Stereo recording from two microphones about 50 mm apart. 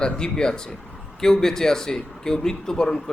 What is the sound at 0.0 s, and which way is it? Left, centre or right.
Speech, centre.